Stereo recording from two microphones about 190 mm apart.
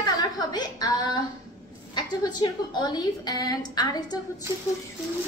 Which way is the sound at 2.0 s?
20° left (ahead or behind).